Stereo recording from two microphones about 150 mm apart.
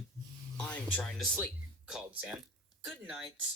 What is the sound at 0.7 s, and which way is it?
Speech, 5° left (ahead or behind).